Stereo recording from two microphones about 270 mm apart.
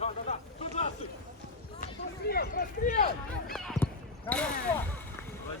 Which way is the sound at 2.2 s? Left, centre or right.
Left.